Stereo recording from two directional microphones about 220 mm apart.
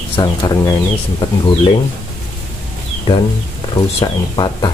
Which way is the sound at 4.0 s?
20° left (ahead or behind).